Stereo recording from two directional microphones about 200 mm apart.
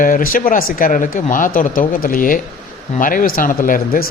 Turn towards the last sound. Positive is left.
turn(degrees=45)  # may be behind; listen again after turning